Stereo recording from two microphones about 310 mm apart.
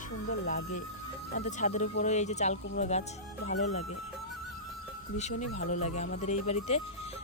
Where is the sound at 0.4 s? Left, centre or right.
Left.